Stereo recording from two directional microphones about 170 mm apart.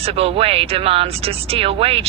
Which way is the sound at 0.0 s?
35° right (ahead or behind).